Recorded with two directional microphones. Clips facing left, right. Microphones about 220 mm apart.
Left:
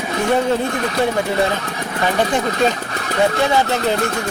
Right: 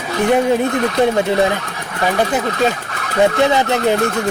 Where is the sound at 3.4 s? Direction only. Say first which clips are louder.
Right 3 dB; 20° right (ahead or behind).